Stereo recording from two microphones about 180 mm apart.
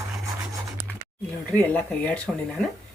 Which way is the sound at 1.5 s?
10° left (ahead or behind).